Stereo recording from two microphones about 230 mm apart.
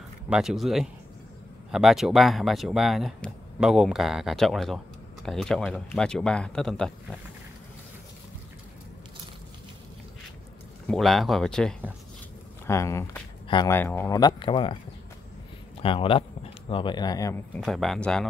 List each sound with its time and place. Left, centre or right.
0.3 s speech: centre
10.9 s speech: centre; by 14.8 s left
15.8 s speech: left
17.6 s speech: centre